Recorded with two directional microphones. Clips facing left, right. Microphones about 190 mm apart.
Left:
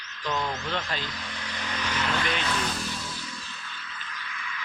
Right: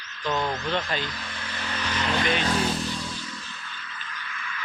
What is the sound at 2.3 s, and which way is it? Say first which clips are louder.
Speech: right 4 dB; 35° right (ahead or behind).